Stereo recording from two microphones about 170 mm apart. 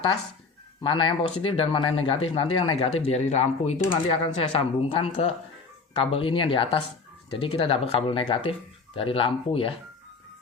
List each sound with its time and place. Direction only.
0.8 s speech: 30° left (ahead or behind)